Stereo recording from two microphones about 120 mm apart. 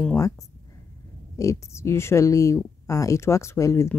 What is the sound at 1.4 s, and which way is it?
Speech, 25° left (ahead or behind).